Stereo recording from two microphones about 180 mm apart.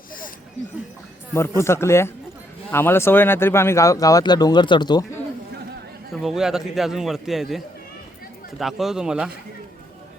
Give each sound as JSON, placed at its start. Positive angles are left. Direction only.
{"t": 1.3, "sound": "speech", "side_deg": 15}
{"t": 6.1, "sound": "a man's voice", "side_deg": 0}